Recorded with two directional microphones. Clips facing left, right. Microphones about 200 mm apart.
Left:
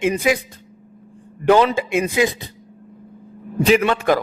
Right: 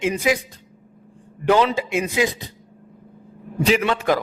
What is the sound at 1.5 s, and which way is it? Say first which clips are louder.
Speech: left 3 dB; 50° left (ahead or behind).